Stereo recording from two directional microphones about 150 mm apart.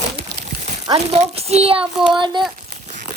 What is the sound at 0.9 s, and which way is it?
A child's voice, 40° right (ahead or behind).